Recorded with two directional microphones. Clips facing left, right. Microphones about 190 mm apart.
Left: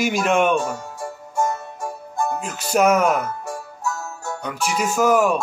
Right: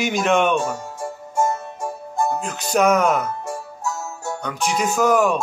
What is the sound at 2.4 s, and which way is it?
Speech, 5° left (ahead or behind).